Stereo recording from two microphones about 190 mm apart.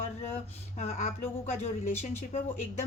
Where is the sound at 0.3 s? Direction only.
35° left (ahead or behind).